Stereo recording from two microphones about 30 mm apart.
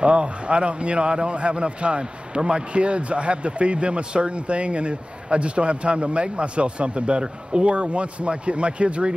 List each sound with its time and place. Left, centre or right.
0.0 s speech: right